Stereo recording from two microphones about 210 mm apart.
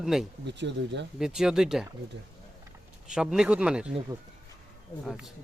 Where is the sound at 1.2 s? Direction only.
Centre (ahead or behind).